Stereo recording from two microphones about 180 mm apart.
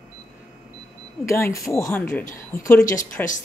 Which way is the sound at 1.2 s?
15° left (ahead or behind).